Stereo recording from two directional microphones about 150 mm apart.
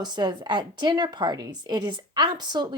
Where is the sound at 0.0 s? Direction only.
30° right (ahead or behind).